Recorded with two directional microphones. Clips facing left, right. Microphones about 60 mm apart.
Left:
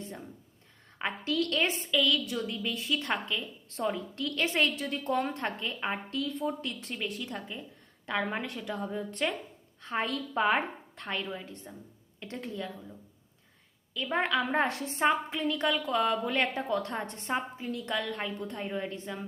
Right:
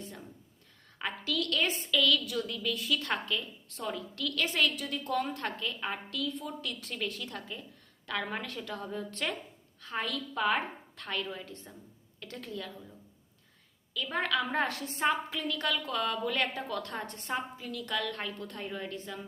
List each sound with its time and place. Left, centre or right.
0.9 s a woman's voice: left
6.9 s a woman's voice: centre
13.9 s a woman's voice: left